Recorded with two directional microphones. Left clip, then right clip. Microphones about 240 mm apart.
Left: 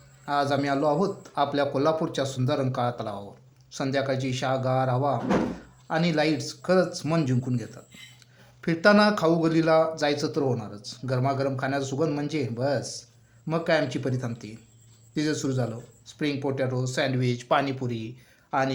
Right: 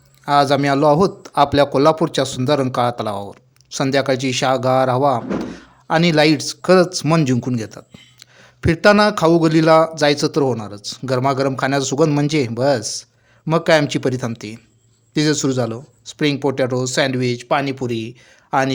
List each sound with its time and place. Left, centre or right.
0.3 s speech: right